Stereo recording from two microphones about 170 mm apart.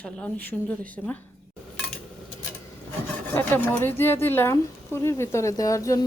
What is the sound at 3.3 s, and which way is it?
Speech, 10° left (ahead or behind).